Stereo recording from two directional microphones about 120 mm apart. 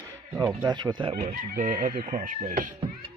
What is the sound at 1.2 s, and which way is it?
Speech, 90° right.